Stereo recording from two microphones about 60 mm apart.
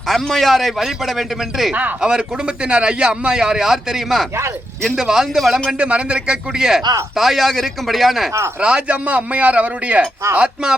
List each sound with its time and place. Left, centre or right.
0.1 s a man's voice: centre
2.0 s a man's voice: centre
5.8 s a man's voice: centre
8.6 s a man's voice: centre